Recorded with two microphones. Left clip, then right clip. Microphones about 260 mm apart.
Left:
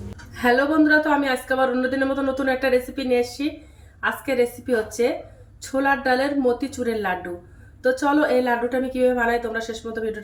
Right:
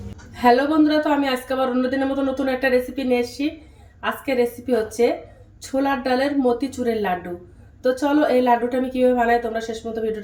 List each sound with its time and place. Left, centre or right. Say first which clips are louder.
0.4 s a woman's voice: right 2 dB; centre
6.1 s a woman's voice: right 1 dB; centre